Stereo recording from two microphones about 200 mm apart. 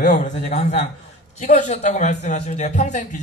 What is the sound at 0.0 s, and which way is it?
A man's voice, 35° left (ahead or behind).